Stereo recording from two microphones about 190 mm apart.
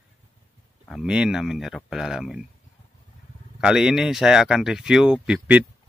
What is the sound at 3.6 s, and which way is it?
Speech, 5° right (ahead or behind).